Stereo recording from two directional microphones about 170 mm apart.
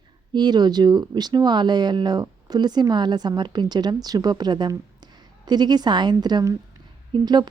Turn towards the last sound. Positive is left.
turn(degrees=-25)  # may be behind; listen again after turning